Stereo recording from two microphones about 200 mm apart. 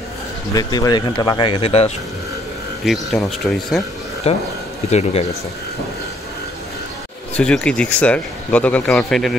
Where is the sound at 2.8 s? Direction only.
Centre (ahead or behind).